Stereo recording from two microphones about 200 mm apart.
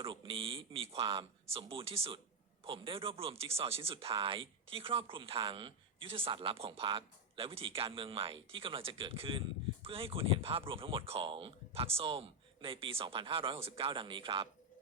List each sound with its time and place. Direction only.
0.0 s speech: 25° right (ahead or behind)